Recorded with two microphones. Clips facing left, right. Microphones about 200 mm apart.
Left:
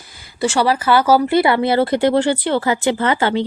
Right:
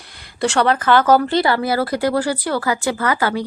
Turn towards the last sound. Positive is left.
turn(degrees=25)  # may be behind; listen again after turning